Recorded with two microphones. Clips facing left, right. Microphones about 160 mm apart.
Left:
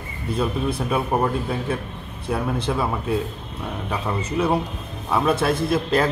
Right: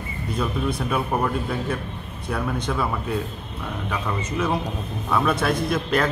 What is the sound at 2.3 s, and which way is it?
Speech, 25° left (ahead or behind).